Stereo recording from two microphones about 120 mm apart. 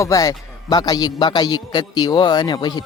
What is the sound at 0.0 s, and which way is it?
A man's voice, 30° left (ahead or behind).